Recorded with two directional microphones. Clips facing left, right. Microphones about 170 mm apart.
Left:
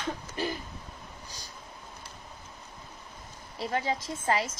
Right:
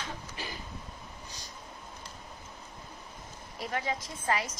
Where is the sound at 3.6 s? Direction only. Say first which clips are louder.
Left 4 dB; 30° left (ahead or behind).